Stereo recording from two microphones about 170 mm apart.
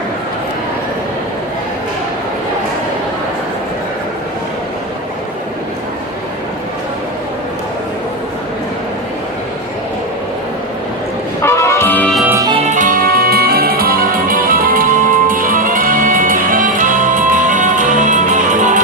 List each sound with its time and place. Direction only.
11.4 s brass instrument: 15° left (ahead or behind)
12.2 s music: 15° right (ahead or behind)
12.6 s music: 50° right (ahead or behind)